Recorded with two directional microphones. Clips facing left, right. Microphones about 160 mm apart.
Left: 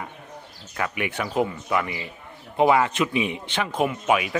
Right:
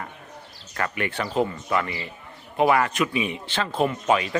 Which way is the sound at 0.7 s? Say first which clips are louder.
Even; 10° left (ahead or behind).